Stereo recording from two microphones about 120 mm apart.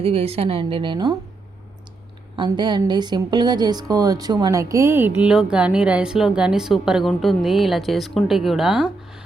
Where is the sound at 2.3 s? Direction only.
40° right (ahead or behind).